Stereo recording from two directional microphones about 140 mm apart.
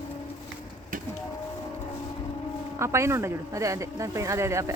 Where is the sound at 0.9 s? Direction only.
80° right.